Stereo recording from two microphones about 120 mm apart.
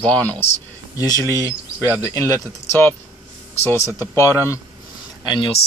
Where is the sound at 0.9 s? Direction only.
30° left (ahead or behind).